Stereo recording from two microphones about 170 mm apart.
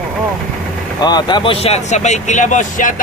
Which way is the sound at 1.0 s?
25° left (ahead or behind).